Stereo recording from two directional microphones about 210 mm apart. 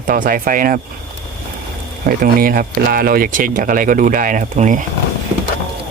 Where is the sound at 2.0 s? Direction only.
45° right (ahead or behind).